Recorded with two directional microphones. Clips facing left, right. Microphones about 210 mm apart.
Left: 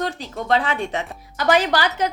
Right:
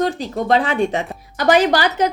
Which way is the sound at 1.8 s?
15° right (ahead or behind).